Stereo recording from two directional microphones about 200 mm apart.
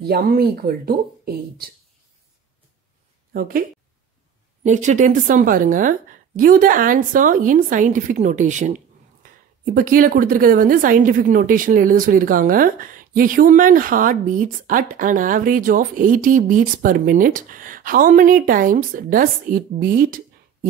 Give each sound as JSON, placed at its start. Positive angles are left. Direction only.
{"t": 0.0, "sound": "speech", "side_deg": -50}
{"t": 3.3, "sound": "a woman's voice", "side_deg": -45}
{"t": 4.6, "sound": "a woman's voice", "side_deg": -35}